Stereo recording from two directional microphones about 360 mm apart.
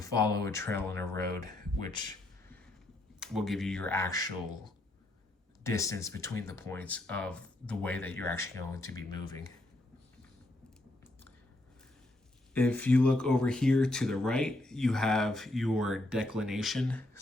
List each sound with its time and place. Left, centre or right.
0.0 s speech: centre
1.8 s speech: right
3.2 s speech: centre
5.6 s speech: centre
12.5 s speech: centre